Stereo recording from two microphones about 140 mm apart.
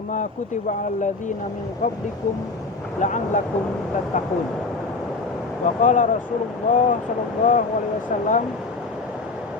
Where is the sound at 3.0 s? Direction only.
65° left (ahead or behind).